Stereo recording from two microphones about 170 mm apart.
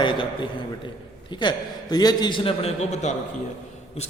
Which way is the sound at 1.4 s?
25° left (ahead or behind).